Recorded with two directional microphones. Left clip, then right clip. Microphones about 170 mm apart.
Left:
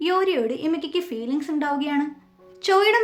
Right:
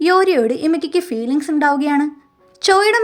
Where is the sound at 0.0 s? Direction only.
40° right (ahead or behind).